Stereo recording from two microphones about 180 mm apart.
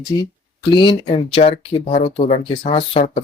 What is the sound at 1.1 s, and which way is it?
Speech, 35° left (ahead or behind).